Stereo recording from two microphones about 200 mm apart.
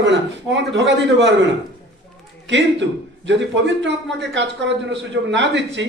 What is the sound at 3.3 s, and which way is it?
A man's voice, 65° right (ahead or behind).